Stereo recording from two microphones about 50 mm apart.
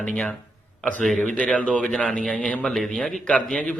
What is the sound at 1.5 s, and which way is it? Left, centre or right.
A man's voice, left.